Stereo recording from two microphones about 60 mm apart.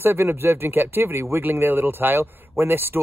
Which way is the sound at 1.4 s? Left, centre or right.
Right.